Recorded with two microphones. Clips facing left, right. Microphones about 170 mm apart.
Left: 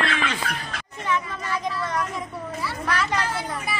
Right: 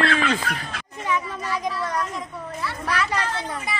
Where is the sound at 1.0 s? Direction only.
10° right (ahead or behind).